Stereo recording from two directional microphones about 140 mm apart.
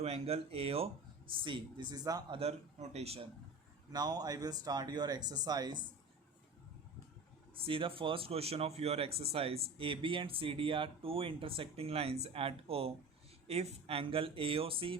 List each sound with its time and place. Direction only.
0.0 s a man's voice: 45° right (ahead or behind); by 2.4 s 30° right (ahead or behind)
2.4 s a man's voice: 50° right (ahead or behind)
3.9 s speech: 30° right (ahead or behind)
7.6 s speech: 40° right (ahead or behind)